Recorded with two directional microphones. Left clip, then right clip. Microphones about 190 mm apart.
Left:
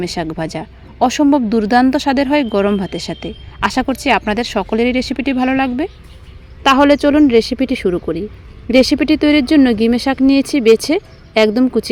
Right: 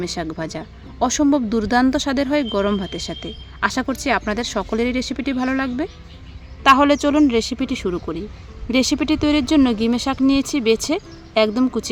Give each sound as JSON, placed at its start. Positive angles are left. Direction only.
{"t": 0.0, "sound": "speech", "side_deg": 15}
{"t": 6.6, "sound": "speech", "side_deg": 5}